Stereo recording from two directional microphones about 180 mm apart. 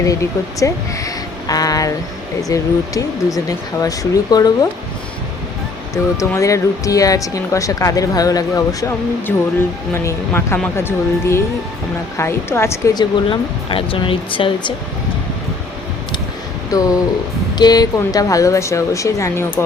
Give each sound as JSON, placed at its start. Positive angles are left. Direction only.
{"t": 0.0, "sound": "speech", "side_deg": 15}
{"t": 5.9, "sound": "speech", "side_deg": 15}
{"t": 16.7, "sound": "speech", "side_deg": 20}